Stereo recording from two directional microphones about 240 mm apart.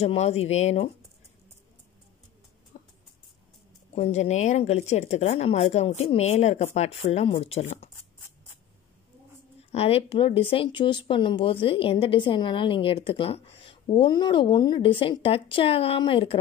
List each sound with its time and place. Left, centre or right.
0.0 s speech: left
2.7 s a sound: left
3.9 s speech: left
9.7 s speech: left